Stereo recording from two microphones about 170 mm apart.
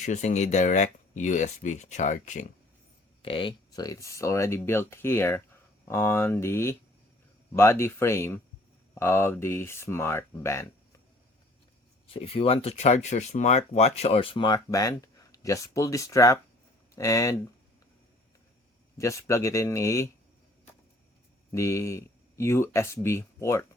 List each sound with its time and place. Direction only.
0.0 s speech: 45° left (ahead or behind)
3.2 s speech: 30° left (ahead or behind)
12.0 s speech: 35° left (ahead or behind); by 17.3 s 20° left (ahead or behind)
18.9 s speech: 20° left (ahead or behind)
21.5 s speech: 15° left (ahead or behind)